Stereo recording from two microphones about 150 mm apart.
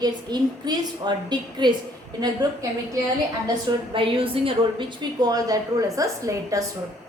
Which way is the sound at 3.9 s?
35° right (ahead or behind).